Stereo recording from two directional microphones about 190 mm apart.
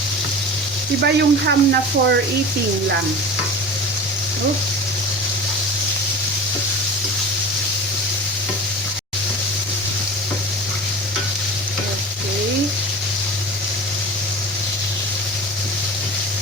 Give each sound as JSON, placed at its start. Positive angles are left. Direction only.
{"t": 1.0, "sound": "speech", "side_deg": -60}